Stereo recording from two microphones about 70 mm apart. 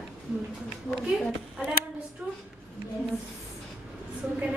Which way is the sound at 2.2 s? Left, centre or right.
Right.